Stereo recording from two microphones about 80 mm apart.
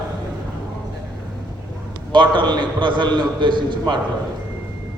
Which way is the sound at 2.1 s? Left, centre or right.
Right.